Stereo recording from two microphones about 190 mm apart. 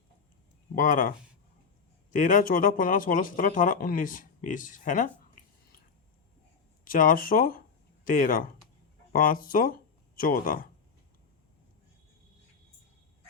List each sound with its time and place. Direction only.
0.8 s speech: 45° left (ahead or behind)
2.1 s speech: 45° left (ahead or behind)
6.8 s speech: 45° left (ahead or behind)